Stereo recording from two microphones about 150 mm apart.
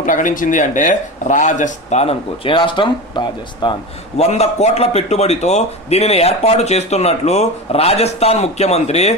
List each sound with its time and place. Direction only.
0.0 s speech: 60° left (ahead or behind); by 3.7 s 30° left (ahead or behind)
4.2 s a man's voice: 45° left (ahead or behind)